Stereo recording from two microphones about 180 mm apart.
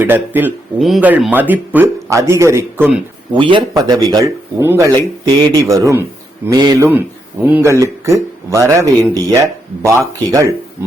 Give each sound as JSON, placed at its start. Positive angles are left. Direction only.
{"t": 0.0, "sound": "a man's voice", "side_deg": -10}
{"t": 3.3, "sound": "a man's voice", "side_deg": -30}